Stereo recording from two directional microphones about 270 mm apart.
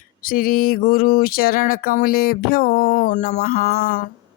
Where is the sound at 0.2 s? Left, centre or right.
Left.